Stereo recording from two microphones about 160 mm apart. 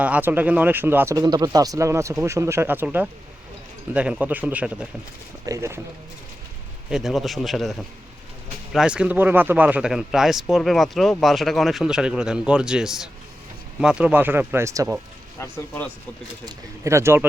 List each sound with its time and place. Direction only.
0.0 s speech: 10° right (ahead or behind)
6.9 s speech: centre (ahead or behind); by 15.0 s 15° right (ahead or behind)
15.4 s speech: 15° left (ahead or behind)
16.5 s speech: 20° right (ahead or behind)